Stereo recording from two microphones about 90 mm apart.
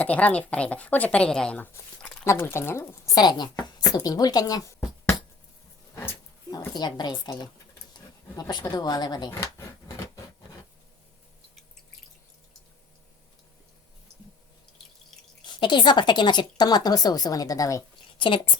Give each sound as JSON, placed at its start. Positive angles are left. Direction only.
{"t": 0.0, "sound": "a woman's voice", "side_deg": 15}
{"t": 1.5, "sound": "speech", "side_deg": 20}
{"t": 3.2, "sound": "a woman's voice", "side_deg": 55}
{"t": 6.7, "sound": "a woman's voice", "side_deg": 50}
{"t": 15.6, "sound": "a woman's voice", "side_deg": 60}